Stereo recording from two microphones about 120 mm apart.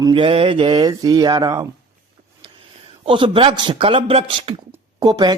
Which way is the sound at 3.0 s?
45° right (ahead or behind).